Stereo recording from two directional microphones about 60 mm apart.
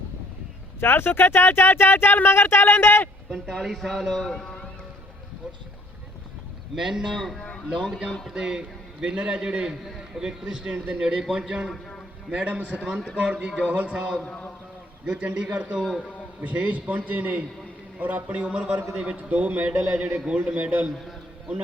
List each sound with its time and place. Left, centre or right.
0.8 s speech: left
3.2 s speech: centre
3.5 s a man's voice: centre
6.7 s a man's voice: centre
7.2 s a man's voice: centre
8.3 s a man's voice: centre
14.2 s a man's voice: centre
15.0 s a man's voice: right
15.8 s a man's voice: centre
16.4 s a man's voice: right